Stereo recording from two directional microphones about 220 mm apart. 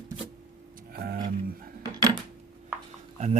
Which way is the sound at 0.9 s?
45° right (ahead or behind).